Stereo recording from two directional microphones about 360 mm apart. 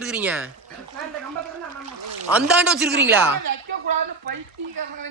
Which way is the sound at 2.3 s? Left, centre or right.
Centre.